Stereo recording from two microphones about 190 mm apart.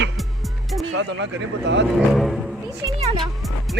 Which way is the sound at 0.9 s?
65° right (ahead or behind).